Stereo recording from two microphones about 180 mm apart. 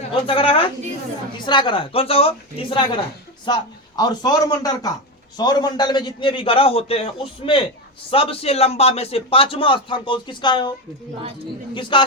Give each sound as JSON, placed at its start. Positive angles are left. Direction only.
{"t": 0.1, "sound": "a man's voice", "side_deg": 30}